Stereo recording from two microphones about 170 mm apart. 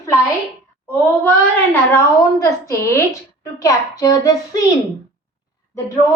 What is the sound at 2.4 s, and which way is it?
Speech, 15° left (ahead or behind).